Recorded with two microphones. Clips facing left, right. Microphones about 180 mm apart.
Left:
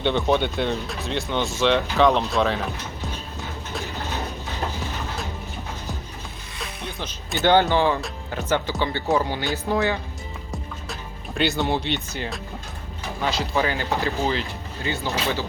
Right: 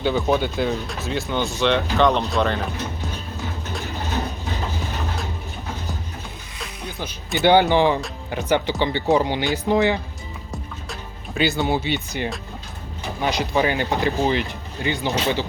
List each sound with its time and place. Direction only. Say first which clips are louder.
0.0 s speech: right 1 dB; 5° right (ahead or behind)
6.6 s music: right 1 dB; 5° right (ahead or behind)
7.3 s speech: right 3 dB; 15° right (ahead or behind)
11.3 s speech: right 2 dB; centre (ahead or behind)
13.2 s speech: right 3 dB; 15° right (ahead or behind)